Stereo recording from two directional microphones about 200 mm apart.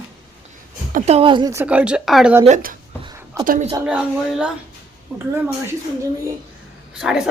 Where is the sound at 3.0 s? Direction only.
15° right (ahead or behind).